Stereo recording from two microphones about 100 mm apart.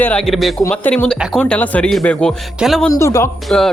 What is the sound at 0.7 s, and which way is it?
Speech, 15° left (ahead or behind).